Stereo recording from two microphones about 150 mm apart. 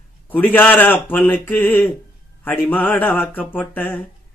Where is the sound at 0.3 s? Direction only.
10° left (ahead or behind).